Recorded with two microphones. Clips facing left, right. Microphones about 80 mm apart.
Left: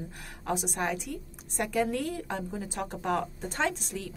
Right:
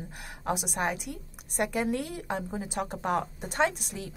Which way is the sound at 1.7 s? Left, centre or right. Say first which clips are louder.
Left 1 dB; centre.